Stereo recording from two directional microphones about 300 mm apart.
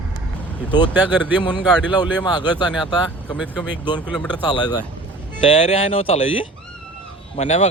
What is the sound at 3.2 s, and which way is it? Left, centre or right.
Speech, centre.